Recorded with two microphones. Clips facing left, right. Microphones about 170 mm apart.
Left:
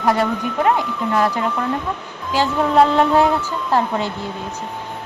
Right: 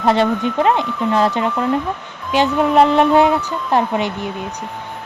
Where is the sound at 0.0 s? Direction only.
25° right (ahead or behind).